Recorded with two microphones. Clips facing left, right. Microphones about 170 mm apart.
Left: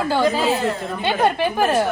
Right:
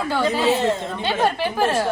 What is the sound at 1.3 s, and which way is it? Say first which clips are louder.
Speech: left 3 dB; 20° left (ahead or behind).